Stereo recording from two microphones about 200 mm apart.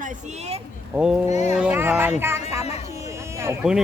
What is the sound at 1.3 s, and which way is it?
Speech, 35° left (ahead or behind).